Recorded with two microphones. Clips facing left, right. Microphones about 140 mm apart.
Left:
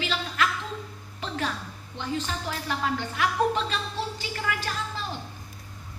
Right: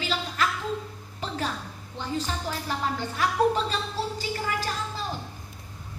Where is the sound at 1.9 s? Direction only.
40° right (ahead or behind).